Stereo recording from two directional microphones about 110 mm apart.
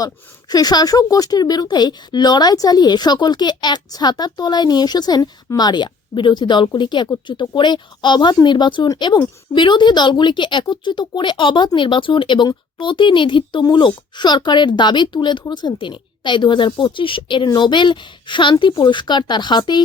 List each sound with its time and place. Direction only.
0.0 s a woman's voice: 35° left (ahead or behind)